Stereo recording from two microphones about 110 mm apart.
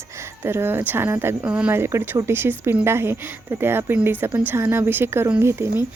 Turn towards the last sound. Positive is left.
turn(degrees=-25)  # may be behind; listen again after turning